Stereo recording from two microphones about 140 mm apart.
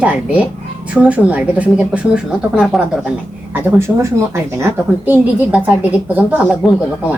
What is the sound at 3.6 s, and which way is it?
A woman's voice, 20° right (ahead or behind).